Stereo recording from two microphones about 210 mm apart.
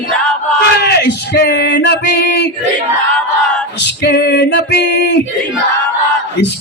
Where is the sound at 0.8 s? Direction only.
50° left (ahead or behind).